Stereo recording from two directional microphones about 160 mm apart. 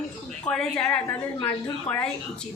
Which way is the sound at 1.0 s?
20° left (ahead or behind).